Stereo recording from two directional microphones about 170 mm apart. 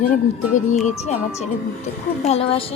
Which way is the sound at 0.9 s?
40° left (ahead or behind).